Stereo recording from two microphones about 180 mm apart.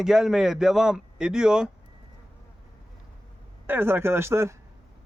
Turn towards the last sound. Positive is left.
turn(degrees=-15)  # may be behind; listen again after turning